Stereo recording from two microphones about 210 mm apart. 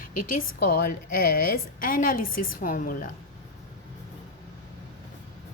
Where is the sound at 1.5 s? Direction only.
40° left (ahead or behind).